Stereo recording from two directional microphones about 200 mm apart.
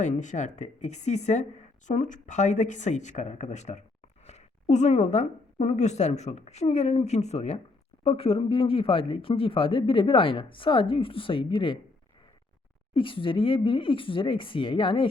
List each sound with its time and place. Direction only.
0.0 s a woman's voice: 35° left (ahead or behind)
12.9 s speech: 25° left (ahead or behind)